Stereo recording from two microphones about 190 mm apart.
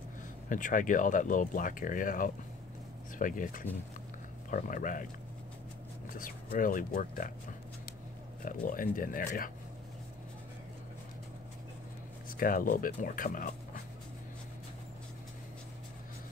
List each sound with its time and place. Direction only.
0.5 s speech: 45° left (ahead or behind)
6.0 s speech: 45° left (ahead or behind)
8.5 s speech: 45° left (ahead or behind)
12.3 s speech: 50° left (ahead or behind)